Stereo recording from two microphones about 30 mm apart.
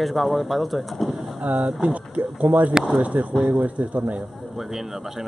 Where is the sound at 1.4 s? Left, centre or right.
Right.